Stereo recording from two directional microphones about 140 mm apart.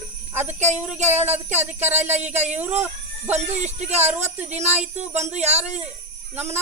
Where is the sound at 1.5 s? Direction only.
15° right (ahead or behind).